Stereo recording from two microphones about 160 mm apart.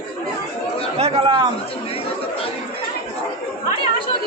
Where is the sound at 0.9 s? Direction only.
40° right (ahead or behind).